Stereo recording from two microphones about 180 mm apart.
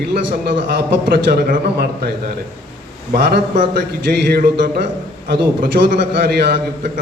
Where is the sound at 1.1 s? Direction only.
65° right (ahead or behind).